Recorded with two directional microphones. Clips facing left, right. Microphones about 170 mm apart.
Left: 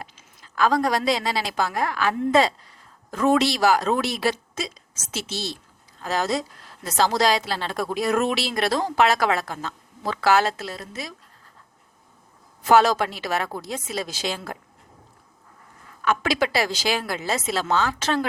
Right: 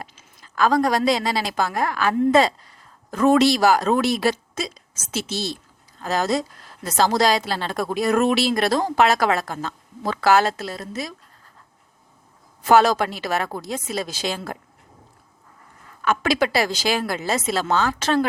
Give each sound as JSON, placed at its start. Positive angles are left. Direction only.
{"t": 0.5, "sound": "a woman's voice", "side_deg": -45}
{"t": 12.6, "sound": "a woman's voice", "side_deg": -45}
{"t": 16.0, "sound": "a woman's voice", "side_deg": -45}